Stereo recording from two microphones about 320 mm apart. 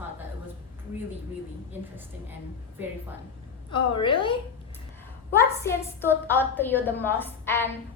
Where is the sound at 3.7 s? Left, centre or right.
Centre.